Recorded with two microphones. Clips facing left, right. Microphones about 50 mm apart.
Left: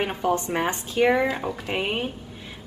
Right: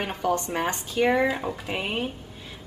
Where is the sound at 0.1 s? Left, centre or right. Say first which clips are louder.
Left 2 dB; centre.